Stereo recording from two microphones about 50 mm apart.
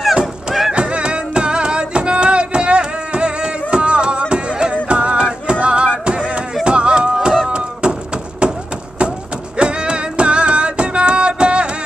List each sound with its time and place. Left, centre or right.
0.0 s music: centre
7.4 s a sound: centre
9.6 s music: centre